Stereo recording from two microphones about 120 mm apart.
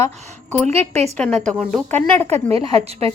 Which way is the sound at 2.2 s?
60° right (ahead or behind).